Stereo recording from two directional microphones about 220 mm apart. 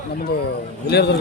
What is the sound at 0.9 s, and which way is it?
Speech, 50° left (ahead or behind).